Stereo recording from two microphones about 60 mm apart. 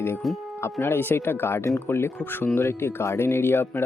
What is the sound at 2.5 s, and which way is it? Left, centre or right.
Speech, left.